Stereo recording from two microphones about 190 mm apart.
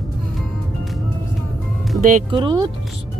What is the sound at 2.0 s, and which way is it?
Speech, 45° right (ahead or behind).